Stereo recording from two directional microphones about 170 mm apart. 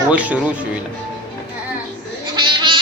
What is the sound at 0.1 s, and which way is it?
Speech, 10° right (ahead or behind).